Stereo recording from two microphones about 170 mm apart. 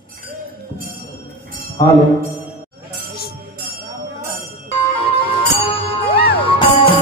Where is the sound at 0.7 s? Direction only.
55° right (ahead or behind).